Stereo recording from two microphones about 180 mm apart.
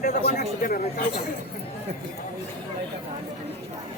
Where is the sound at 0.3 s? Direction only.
55° left (ahead or behind).